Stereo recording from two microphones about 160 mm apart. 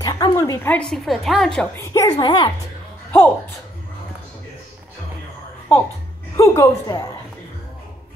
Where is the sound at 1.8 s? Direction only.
20° left (ahead or behind).